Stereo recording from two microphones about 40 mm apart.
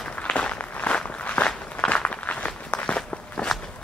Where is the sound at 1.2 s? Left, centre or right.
Left.